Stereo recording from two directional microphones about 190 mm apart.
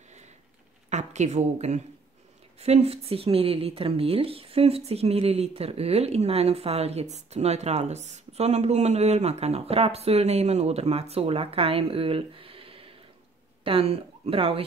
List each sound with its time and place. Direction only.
0.8 s a woman's voice: 40° right (ahead or behind)